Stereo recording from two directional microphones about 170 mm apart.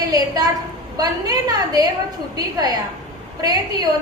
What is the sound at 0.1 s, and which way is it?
A woman's voice, 20° right (ahead or behind).